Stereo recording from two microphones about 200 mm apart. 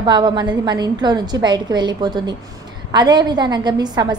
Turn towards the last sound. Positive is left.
turn(degrees=-20)  # may be behind; listen again after turning